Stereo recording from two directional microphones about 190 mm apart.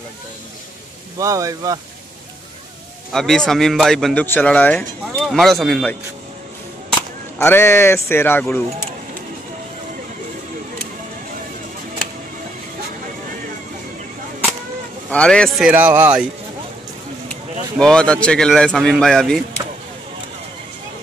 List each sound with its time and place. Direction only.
1.1 s speech: 15° right (ahead or behind)
3.1 s a man's voice: centre (ahead or behind)
7.3 s speech: 10° left (ahead or behind)
15.0 s a man's voice: 5° left (ahead or behind); by 16.3 s 10° right (ahead or behind)
17.3 s speech: 5° left (ahead or behind)